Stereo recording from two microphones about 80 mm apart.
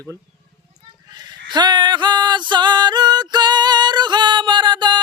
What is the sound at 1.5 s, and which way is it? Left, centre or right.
Music, right.